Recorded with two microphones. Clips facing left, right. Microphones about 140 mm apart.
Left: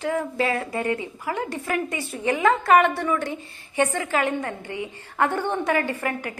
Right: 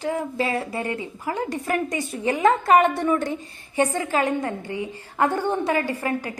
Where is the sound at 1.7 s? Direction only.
40° right (ahead or behind).